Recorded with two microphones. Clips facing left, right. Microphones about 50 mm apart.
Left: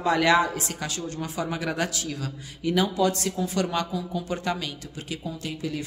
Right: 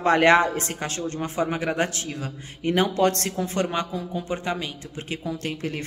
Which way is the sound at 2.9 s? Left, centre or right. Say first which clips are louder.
Right 2 dB; right.